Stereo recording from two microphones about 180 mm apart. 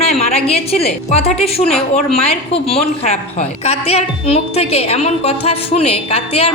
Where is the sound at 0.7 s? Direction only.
35° left (ahead or behind).